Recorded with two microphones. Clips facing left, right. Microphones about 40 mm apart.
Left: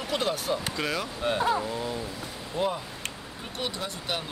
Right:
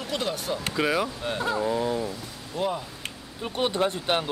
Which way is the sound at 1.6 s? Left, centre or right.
Centre.